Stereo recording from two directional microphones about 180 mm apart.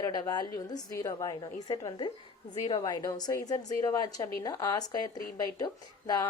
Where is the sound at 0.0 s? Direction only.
20° left (ahead or behind).